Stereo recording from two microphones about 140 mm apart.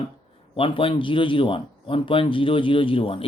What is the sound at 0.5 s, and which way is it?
A man's voice, 40° left (ahead or behind).